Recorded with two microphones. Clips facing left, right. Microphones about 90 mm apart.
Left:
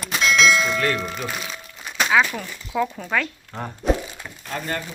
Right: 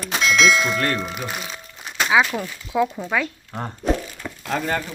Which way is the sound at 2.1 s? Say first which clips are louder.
Right 2 dB; 10° right (ahead or behind).